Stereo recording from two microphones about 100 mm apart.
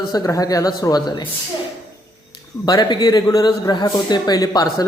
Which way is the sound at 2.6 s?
45° left (ahead or behind).